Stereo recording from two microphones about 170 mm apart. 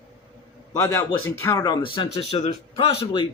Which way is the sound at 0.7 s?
15° left (ahead or behind).